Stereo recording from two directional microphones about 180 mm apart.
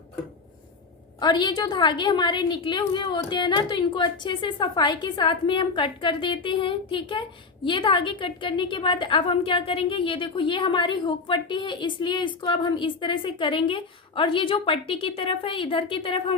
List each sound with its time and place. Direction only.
1.2 s a woman's voice: 25° left (ahead or behind)